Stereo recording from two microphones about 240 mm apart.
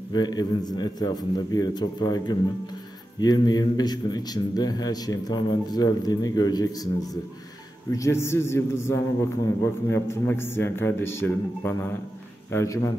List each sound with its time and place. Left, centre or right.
0.1 s a man's voice: centre